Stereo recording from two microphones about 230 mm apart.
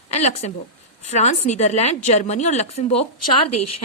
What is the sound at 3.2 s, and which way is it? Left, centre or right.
Speech, left.